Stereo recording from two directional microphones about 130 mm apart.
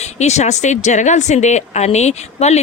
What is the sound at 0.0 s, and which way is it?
Speech, 60° left (ahead or behind).